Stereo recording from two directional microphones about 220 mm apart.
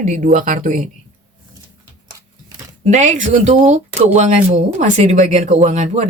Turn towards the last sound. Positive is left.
turn(degrees=-30)  # may be behind; listen again after turning